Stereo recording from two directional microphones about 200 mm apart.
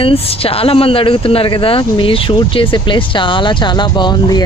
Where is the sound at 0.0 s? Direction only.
30° left (ahead or behind).